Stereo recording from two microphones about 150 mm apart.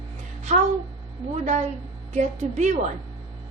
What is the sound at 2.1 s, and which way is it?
Speech, 55° right (ahead or behind).